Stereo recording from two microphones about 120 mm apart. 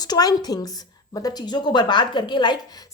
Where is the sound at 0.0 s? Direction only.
35° left (ahead or behind).